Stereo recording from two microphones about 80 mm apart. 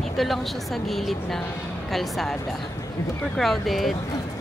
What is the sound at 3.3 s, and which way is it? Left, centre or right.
Speech, centre.